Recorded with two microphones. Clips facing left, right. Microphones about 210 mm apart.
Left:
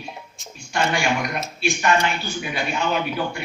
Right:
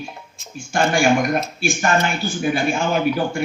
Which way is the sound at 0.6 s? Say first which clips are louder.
Right 5 dB; 45° right (ahead or behind).